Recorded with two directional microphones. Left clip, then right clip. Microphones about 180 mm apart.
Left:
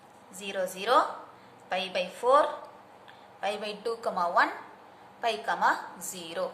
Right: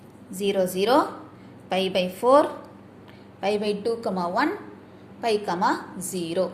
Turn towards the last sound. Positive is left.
turn(degrees=-15)  # may be behind; listen again after turning